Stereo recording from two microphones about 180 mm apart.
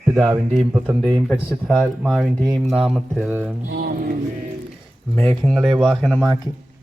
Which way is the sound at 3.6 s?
65° right (ahead or behind).